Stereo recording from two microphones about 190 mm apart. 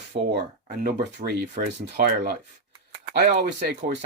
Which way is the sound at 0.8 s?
55° right (ahead or behind).